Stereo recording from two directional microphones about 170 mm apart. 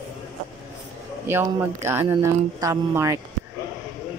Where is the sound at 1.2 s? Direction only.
15° right (ahead or behind).